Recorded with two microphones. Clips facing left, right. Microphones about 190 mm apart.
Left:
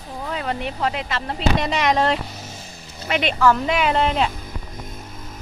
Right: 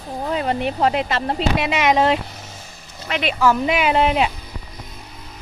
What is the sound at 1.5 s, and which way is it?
Speech, 5° right (ahead or behind).